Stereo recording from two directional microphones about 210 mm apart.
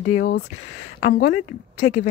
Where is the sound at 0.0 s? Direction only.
40° left (ahead or behind).